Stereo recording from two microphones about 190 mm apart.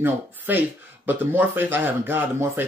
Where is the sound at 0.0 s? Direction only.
10° right (ahead or behind).